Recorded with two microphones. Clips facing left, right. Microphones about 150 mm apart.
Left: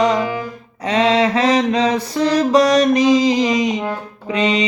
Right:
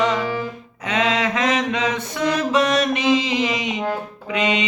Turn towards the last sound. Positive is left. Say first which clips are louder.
# left 4 dB
turn(degrees=35)  # may be behind; listen again after turning